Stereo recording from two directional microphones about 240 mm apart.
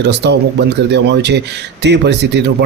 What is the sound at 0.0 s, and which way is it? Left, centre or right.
Speech, right.